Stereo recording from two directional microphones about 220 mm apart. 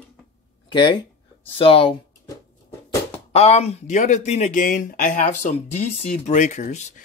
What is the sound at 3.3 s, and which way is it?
Speech, 30° left (ahead or behind).